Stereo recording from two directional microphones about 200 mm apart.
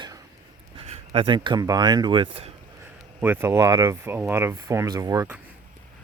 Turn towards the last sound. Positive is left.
turn(degrees=-15)  # may be behind; listen again after turning